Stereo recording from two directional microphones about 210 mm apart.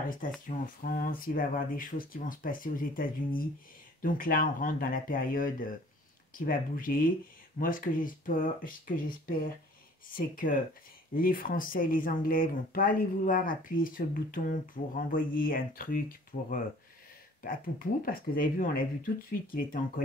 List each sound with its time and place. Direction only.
0.5 s speech: 40° left (ahead or behind)